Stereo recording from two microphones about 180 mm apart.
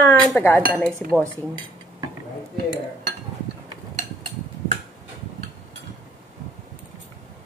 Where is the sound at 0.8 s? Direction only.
5° left (ahead or behind).